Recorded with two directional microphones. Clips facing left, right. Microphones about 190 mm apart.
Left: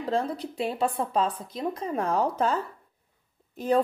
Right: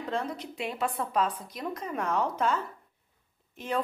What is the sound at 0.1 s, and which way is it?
A woman's voice, 30° left (ahead or behind).